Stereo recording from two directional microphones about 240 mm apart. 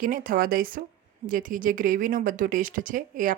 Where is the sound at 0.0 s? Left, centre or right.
Right.